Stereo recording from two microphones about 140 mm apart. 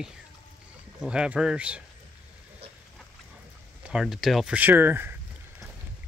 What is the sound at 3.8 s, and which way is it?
Speech, 5° right (ahead or behind).